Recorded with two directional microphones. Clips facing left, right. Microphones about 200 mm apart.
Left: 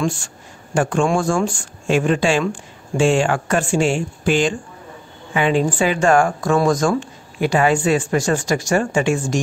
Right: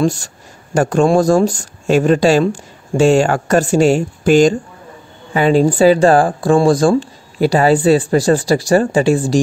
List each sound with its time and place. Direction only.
0.0 s speech: 40° right (ahead or behind)